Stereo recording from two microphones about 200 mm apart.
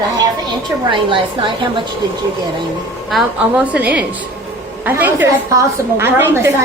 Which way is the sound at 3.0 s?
5° right (ahead or behind).